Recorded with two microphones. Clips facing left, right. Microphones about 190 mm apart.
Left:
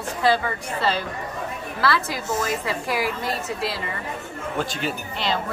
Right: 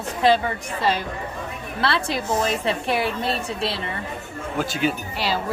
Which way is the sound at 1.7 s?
25° right (ahead or behind).